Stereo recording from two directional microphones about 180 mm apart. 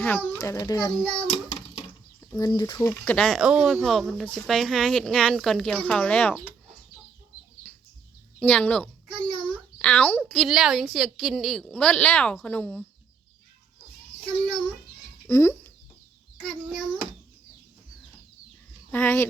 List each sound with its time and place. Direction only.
0.0 s a child's voice: 15° left (ahead or behind)
1.3 s a sound: 35° left (ahead or behind)
2.2 s a child's voice: 20° left (ahead or behind)
7.6 s bird: 10° left (ahead or behind)
8.4 s a child's voice: 10° left (ahead or behind)
15.3 s speech: 15° left (ahead or behind)
16.4 s a child's voice: 5° left (ahead or behind)
18.9 s speech: 10° left (ahead or behind)